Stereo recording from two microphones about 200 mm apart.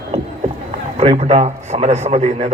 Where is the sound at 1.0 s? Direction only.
30° right (ahead or behind).